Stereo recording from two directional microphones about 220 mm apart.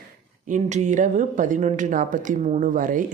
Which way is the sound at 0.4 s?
35° right (ahead or behind).